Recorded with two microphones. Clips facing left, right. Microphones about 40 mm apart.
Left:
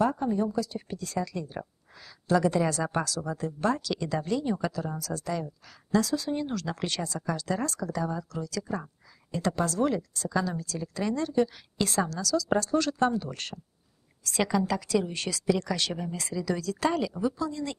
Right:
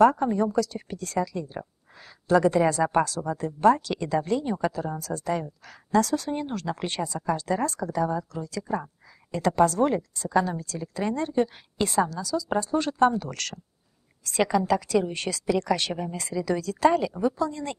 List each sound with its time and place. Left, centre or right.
0.0 s speech: right
1.3 s speech: right
6.5 s speech: right
7.3 s speech: right
11.9 s speech: right
13.1 s speech: right
14.4 s a woman's voice: centre
17.2 s speech: right